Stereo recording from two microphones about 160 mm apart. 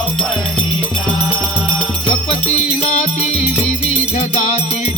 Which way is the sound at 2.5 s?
45° left (ahead or behind).